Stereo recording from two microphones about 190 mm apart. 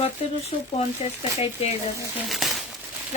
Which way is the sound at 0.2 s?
30° left (ahead or behind).